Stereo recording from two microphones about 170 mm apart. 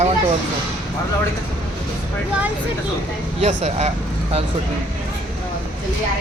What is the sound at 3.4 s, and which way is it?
Speech, 40° right (ahead or behind).